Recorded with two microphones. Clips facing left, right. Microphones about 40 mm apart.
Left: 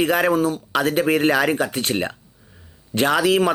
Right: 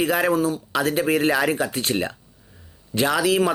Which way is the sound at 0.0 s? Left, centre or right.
Left.